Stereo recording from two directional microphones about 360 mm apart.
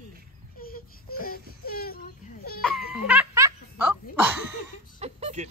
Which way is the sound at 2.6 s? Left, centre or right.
Centre.